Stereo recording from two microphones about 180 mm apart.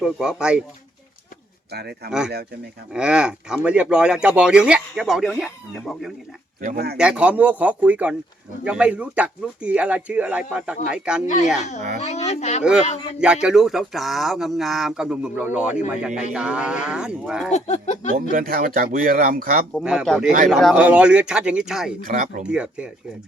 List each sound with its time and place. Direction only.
0.0 s speech: 5° right (ahead or behind)
1.7 s speech: 65° right (ahead or behind)
2.0 s speech: 5° right (ahead or behind)
11.9 s speech: 40° left (ahead or behind)
13.1 s speech: 5° right (ahead or behind)
17.5 s speech: 40° left (ahead or behind)
18.3 s speech: 50° right (ahead or behind)
19.7 s speech: 5° right (ahead or behind)